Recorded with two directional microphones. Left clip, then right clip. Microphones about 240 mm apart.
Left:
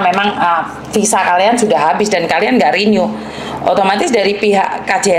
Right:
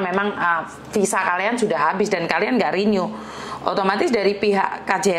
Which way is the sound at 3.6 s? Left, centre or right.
Right.